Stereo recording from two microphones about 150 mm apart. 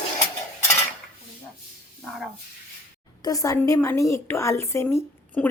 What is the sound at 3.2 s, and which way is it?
A woman's voice, 25° left (ahead or behind).